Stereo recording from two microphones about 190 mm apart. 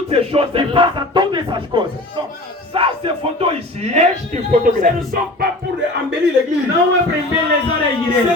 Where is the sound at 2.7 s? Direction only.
30° right (ahead or behind); by 5.2 s 45° right (ahead or behind).